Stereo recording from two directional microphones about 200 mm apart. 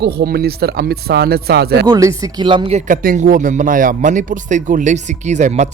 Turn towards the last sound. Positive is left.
turn(degrees=-35)  # may be behind; listen again after turning